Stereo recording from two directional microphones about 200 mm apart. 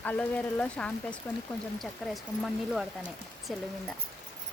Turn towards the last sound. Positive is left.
turn(degrees=0)  # may be behind; listen again after turning